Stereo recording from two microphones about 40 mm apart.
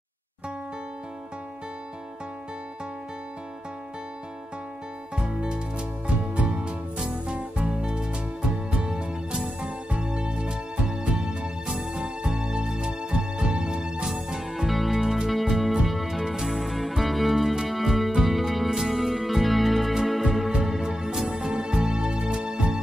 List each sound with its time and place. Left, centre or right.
5.1 s music: right
14.3 s music: centre
14.7 s music: centre
15.0 s music: centre